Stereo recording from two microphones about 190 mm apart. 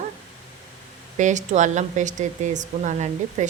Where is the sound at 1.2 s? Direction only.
40° right (ahead or behind).